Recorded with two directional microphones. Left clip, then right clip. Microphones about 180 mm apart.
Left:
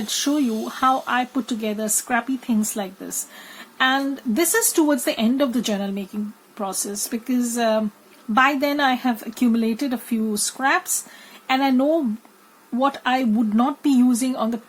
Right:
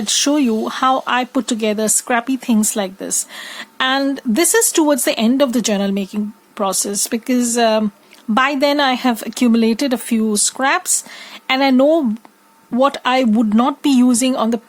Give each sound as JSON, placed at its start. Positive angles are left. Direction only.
{"t": 0.0, "sound": "speech", "side_deg": -50}